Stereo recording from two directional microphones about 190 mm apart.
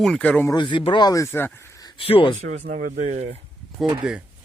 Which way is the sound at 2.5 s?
40° right (ahead or behind).